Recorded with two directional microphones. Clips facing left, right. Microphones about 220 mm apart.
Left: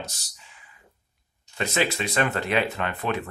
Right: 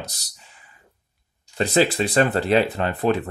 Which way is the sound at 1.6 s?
35° right (ahead or behind).